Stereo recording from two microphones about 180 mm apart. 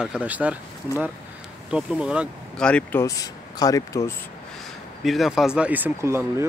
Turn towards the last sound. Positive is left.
turn(degrees=-15)  # may be behind; listen again after turning